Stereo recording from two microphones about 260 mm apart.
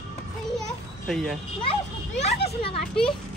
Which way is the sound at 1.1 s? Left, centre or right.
Centre.